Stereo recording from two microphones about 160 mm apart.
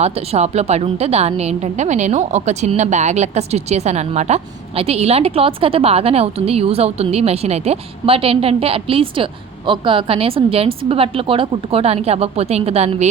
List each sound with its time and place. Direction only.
0.0 s a woman's voice: 40° right (ahead or behind)